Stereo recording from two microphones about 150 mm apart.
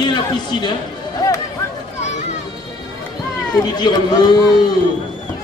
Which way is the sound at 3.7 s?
25° left (ahead or behind).